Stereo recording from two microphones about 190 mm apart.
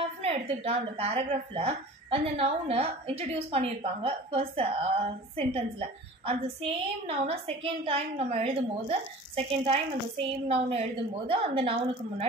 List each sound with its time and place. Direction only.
0.2 s speech: 30° right (ahead or behind)